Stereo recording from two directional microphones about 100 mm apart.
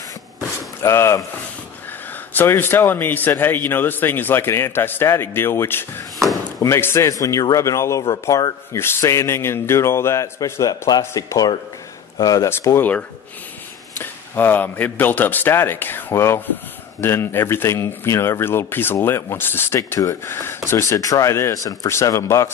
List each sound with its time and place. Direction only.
0.8 s speech: 30° left (ahead or behind)
2.3 s speech: 20° left (ahead or behind)
6.2 s chop: 35° right (ahead or behind)
6.6 s speech: 25° left (ahead or behind)
8.7 s speech: 25° left (ahead or behind); by 12.4 s 40° left (ahead or behind)
12.4 s speech: 25° left (ahead or behind)
13.9 s speech: 20° left (ahead or behind)